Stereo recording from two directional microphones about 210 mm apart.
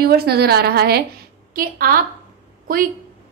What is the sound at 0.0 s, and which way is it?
A woman's voice, 50° right (ahead or behind).